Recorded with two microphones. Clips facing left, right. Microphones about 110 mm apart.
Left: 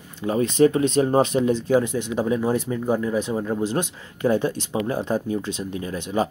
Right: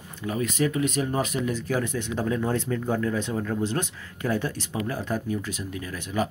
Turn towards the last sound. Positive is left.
turn(degrees=30)  # may be behind; listen again after turning